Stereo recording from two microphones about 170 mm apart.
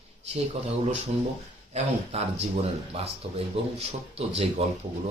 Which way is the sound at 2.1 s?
40° right (ahead or behind).